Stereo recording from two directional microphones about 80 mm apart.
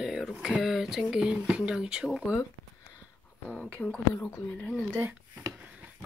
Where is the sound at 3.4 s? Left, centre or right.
Centre.